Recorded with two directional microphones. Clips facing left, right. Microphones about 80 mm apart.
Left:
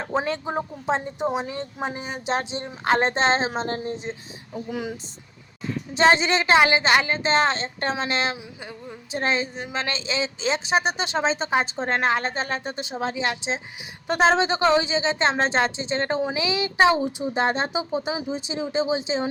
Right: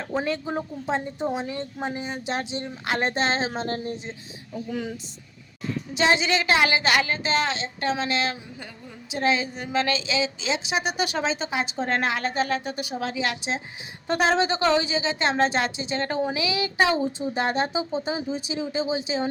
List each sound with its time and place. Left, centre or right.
0.0 s a woman's voice: left
6.0 s a woman's voice: left